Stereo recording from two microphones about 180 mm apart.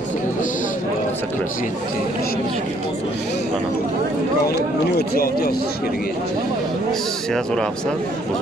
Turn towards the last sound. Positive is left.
turn(degrees=5)  # may be behind; listen again after turning